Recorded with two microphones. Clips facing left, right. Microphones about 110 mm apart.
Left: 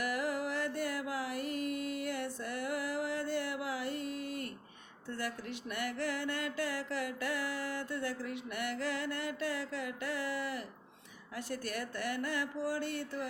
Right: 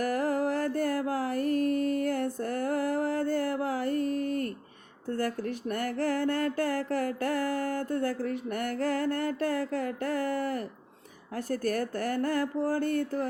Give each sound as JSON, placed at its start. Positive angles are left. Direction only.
{"t": 0.0, "sound": "music", "side_deg": -45}
{"t": 5.0, "sound": "mantra", "side_deg": -45}